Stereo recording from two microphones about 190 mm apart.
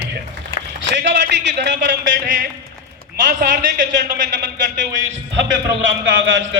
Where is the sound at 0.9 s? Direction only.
65° right (ahead or behind).